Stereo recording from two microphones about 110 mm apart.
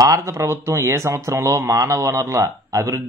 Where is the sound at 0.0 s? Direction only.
25° right (ahead or behind).